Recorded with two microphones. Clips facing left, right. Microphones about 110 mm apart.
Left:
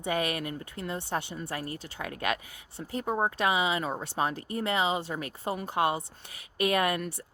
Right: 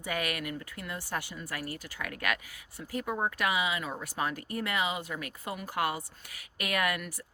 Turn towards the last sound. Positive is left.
turn(degrees=30)  # may be behind; listen again after turning